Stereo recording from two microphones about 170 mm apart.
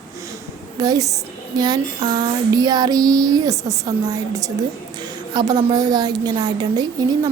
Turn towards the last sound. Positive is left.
turn(degrees=-20)  # may be behind; listen again after turning